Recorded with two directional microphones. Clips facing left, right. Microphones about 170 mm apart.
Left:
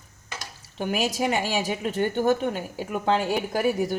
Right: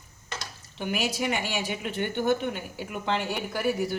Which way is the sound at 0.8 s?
40° left (ahead or behind).